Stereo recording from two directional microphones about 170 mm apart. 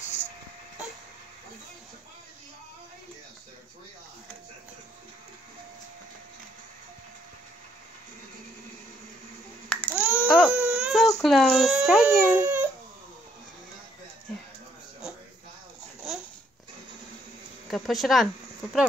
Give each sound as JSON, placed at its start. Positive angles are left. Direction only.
{"t": 9.9, "sound": "baby cry", "side_deg": -10}
{"t": 11.2, "sound": "speech", "side_deg": 0}
{"t": 17.6, "sound": "speech", "side_deg": 0}